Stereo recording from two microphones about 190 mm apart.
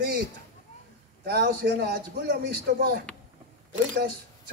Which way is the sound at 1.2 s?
60° right (ahead or behind).